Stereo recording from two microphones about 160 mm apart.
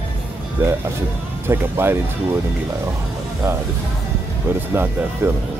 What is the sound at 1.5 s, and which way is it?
Speech, 15° right (ahead or behind).